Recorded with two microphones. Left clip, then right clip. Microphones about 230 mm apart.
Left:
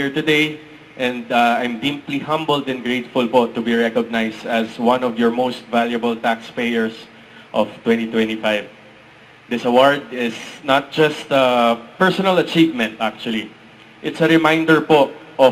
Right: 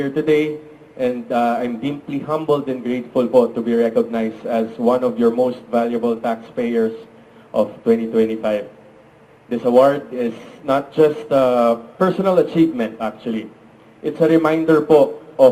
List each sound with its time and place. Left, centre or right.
0.0 s a man's voice: centre